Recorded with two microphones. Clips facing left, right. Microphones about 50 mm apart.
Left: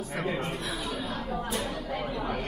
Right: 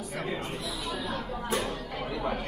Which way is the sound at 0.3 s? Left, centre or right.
Left.